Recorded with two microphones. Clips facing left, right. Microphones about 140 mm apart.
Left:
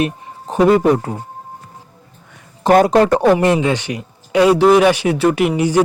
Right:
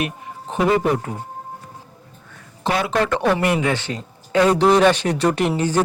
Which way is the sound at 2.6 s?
45° left (ahead or behind).